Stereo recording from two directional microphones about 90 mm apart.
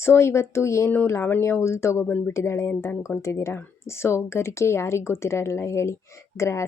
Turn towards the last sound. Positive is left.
turn(degrees=30)  # may be behind; listen again after turning